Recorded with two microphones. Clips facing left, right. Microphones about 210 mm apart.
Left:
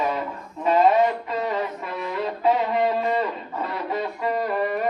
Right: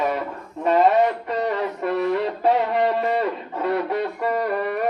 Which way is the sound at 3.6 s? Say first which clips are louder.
Right 6 dB; 65° right (ahead or behind).